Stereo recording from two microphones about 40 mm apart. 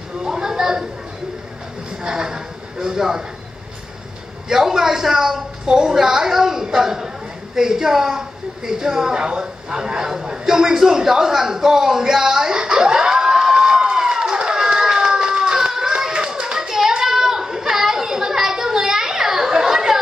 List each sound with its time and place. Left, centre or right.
0.2 s a sound: centre
2.0 s speech: centre
4.5 s a woman's voice: centre
13.7 s run: right
15.3 s hands: centre
17.0 s children playing: centre